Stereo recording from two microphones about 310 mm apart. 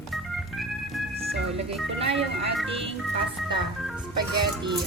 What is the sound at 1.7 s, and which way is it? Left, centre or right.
Speech, centre.